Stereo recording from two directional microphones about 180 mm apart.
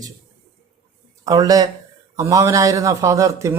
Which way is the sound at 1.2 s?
20° right (ahead or behind).